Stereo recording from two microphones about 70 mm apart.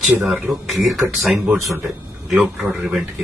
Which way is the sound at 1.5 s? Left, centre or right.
Right.